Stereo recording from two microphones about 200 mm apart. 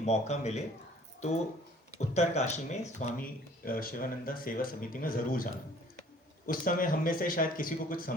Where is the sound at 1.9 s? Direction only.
35° left (ahead or behind).